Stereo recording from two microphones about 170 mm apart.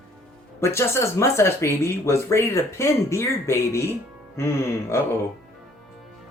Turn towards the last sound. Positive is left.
turn(degrees=15)  # may be behind; listen again after turning